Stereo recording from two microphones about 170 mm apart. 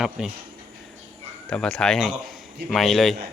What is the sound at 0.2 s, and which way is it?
Speech, centre (ahead or behind).